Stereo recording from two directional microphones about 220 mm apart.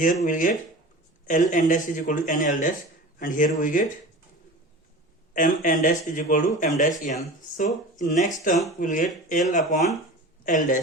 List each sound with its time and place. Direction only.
0.0 s speech: 35° left (ahead or behind)
5.3 s speech: 35° left (ahead or behind)